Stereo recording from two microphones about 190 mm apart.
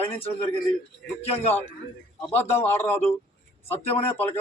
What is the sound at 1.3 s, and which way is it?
Speech, 30° left (ahead or behind).